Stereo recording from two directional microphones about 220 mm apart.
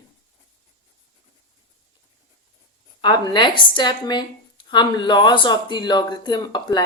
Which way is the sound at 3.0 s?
20° left (ahead or behind).